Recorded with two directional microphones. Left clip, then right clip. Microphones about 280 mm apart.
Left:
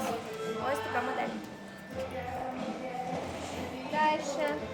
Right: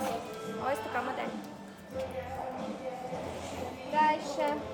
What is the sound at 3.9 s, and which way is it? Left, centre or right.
Speech, centre.